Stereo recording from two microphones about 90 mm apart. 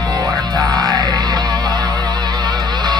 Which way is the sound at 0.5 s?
45° right (ahead or behind).